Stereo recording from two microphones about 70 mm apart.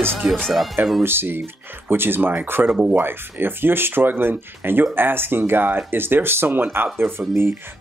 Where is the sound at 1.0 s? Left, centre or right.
Right.